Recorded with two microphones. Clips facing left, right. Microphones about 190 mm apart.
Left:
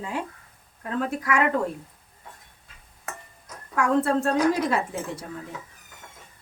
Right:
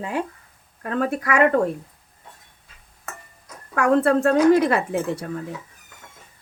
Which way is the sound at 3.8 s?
65° right (ahead or behind).